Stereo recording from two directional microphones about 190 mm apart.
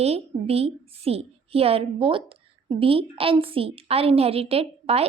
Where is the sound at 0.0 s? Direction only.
30° right (ahead or behind).